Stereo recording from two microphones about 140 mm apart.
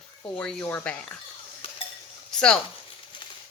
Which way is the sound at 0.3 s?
5° left (ahead or behind).